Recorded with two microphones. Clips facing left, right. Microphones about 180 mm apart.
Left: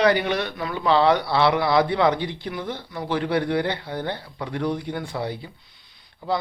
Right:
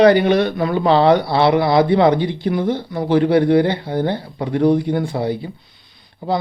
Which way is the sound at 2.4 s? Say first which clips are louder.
Right 11 dB; 40° right (ahead or behind).